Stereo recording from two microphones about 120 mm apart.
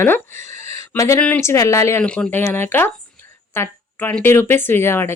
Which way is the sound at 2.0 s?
15° left (ahead or behind).